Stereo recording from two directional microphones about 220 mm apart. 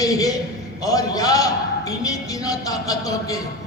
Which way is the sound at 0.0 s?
15° left (ahead or behind).